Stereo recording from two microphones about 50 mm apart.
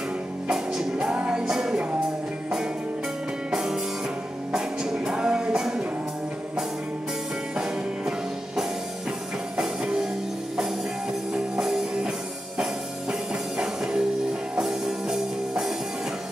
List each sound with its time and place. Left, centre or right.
0.5 s music: centre
0.9 s music: right
3.5 s music: centre
7.5 s music: centre
9.6 s music: centre
11.3 s music: centre
13.3 s music: centre